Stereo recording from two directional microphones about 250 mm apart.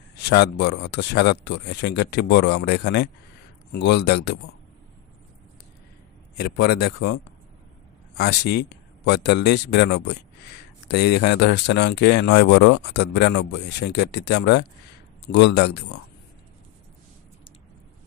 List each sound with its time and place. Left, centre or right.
0.2 s speech: left
6.3 s speech: left
8.5 s speech: left